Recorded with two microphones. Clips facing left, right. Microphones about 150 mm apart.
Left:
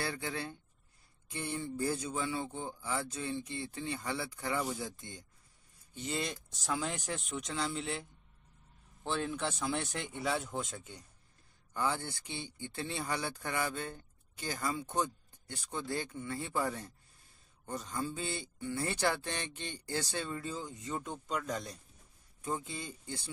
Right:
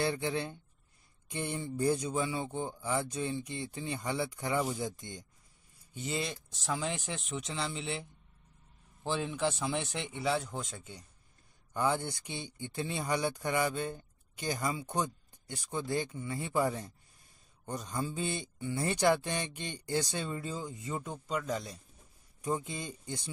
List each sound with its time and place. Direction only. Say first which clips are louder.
0.0 s speech: right 6 dB; 20° right (ahead or behind)
4.6 s speech: right 4 dB; centre (ahead or behind)
4.8 s speech: right 5 dB; 20° right (ahead or behind)
5.9 s speech: right 1 dB; 5° right (ahead or behind)
11.7 s speech: right 4 dB; 20° right (ahead or behind); by 21.7 s centre (ahead or behind)
22.4 s speech: right 4 dB; 15° right (ahead or behind)